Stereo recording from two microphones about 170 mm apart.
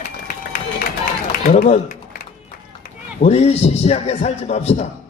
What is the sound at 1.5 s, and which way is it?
Speech, 55° left (ahead or behind).